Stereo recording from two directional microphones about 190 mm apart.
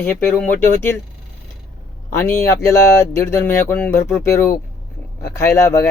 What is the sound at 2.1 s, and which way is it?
Speech, 15° left (ahead or behind).